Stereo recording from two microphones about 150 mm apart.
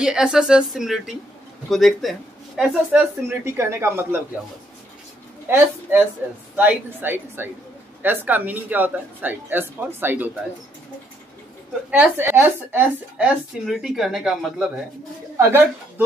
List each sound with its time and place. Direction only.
0.0 s speech: 5° right (ahead or behind)
2.9 s a woman's voice: 15° right (ahead or behind)
5.5 s a woman's voice: 15° right (ahead or behind)
11.9 s a woman's voice: 15° right (ahead or behind)